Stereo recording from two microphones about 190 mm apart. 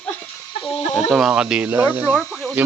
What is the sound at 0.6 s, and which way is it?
Speech, 35° left (ahead or behind).